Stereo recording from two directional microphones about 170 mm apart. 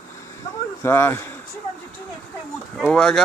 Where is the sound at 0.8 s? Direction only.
15° left (ahead or behind).